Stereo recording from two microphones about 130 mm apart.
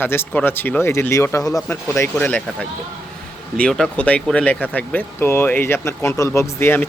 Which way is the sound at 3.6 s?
5° left (ahead or behind).